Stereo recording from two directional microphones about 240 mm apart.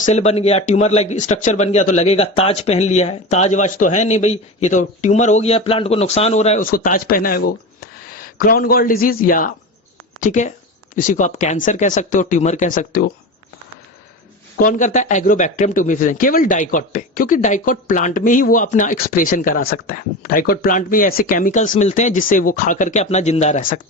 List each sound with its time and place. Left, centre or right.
0.0 s speech: left
14.6 s speech: left